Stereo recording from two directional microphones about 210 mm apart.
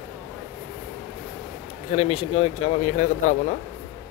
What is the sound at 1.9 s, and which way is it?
Speech, 25° left (ahead or behind).